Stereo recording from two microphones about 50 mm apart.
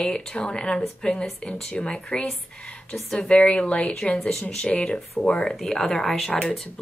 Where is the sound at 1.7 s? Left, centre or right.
Left.